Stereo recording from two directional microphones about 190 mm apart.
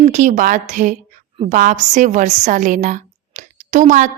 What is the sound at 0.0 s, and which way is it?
A woman's voice, 40° right (ahead or behind).